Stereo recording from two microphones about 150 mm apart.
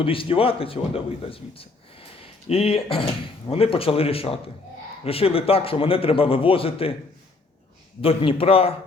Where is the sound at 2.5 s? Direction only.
40° left (ahead or behind).